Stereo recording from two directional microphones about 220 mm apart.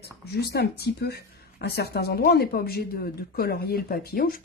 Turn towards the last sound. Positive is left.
turn(degrees=40)  # may be behind; listen again after turning